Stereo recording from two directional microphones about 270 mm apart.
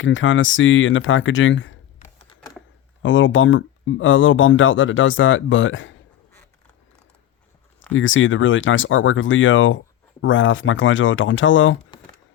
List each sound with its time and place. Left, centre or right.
0.0 s speech: left
2.1 s a sound: centre
3.0 s speech: left
7.9 s speech: left